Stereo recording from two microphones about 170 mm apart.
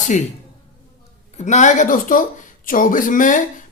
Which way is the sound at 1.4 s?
45° left (ahead or behind).